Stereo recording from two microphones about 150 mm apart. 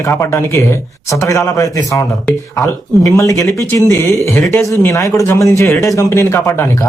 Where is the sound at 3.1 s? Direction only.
20° left (ahead or behind).